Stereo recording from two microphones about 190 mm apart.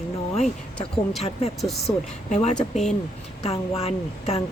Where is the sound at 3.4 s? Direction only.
30° left (ahead or behind).